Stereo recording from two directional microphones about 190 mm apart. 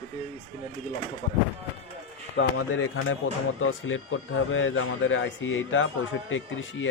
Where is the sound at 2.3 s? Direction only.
75° left (ahead or behind).